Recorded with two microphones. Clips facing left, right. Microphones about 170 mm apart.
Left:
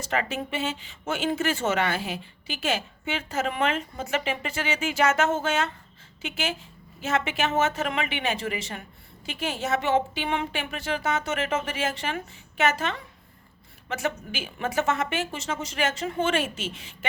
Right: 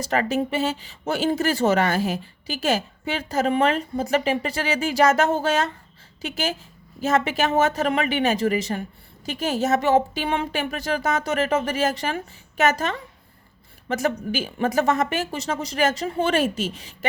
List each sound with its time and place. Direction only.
0.0 s speech: 40° right (ahead or behind)